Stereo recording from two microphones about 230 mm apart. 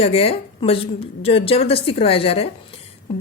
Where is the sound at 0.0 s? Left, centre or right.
Left.